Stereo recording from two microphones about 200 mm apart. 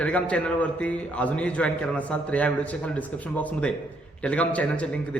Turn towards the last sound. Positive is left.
turn(degrees=5)  # may be behind; listen again after turning